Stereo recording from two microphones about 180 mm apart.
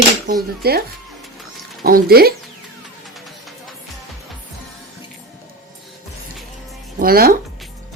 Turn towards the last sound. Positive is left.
turn(degrees=-55)  # may be behind; listen again after turning